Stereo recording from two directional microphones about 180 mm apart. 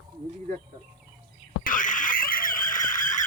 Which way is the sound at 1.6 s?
45° left (ahead or behind).